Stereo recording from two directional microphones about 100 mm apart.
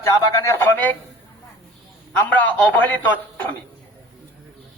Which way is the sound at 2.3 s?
15° left (ahead or behind).